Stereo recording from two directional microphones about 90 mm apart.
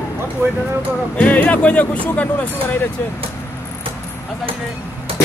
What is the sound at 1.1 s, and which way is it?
Speech, 15° left (ahead or behind).